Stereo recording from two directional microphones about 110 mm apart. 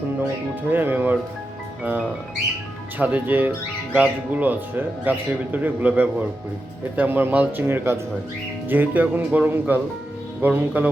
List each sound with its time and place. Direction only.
0.7 s speech: 15° right (ahead or behind)